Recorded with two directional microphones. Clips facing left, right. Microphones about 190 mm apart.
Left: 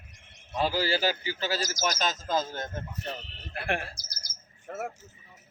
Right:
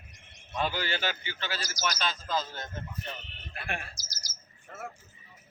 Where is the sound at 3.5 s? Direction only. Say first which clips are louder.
Left 7 dB; 60° left (ahead or behind).